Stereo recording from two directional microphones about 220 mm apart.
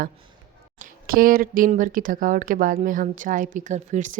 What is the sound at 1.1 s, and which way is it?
Speech, 40° right (ahead or behind).